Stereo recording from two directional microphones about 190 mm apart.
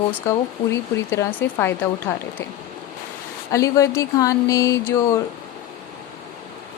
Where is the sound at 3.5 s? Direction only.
15° left (ahead or behind).